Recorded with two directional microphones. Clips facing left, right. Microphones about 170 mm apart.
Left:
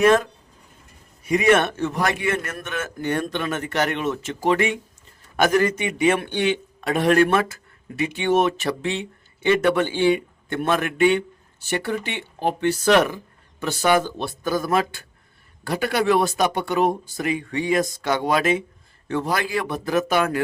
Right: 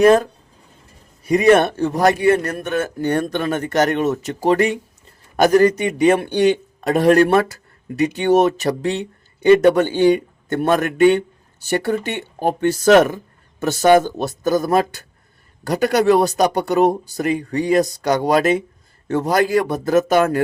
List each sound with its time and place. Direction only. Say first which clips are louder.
0.0 s a man's voice: right 5 dB; 35° right (ahead or behind)